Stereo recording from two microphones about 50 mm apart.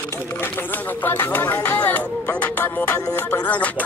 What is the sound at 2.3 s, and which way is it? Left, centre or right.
Speech, left.